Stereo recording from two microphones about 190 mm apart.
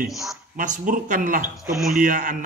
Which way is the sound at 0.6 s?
45° right (ahead or behind).